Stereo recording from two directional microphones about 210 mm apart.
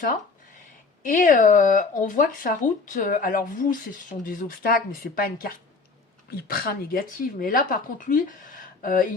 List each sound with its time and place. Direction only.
1.0 s speech: 40° left (ahead or behind)